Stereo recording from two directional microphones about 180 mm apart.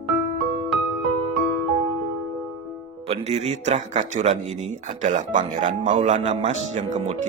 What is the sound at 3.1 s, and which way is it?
Speech, 35° right (ahead or behind).